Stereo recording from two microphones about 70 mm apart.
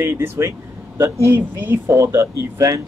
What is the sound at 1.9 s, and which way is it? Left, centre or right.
Speech, right.